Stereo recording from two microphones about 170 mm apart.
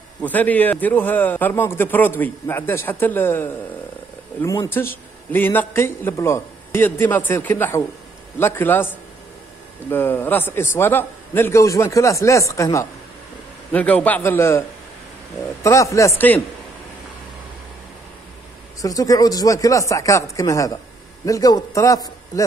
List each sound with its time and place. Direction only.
0.2 s a man's voice: 10° left (ahead or behind)
15.6 s a man's voice: 15° left (ahead or behind)
18.8 s speech: 20° left (ahead or behind)